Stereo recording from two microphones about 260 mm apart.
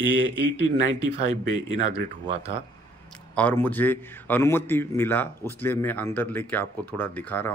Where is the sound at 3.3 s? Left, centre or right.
Centre.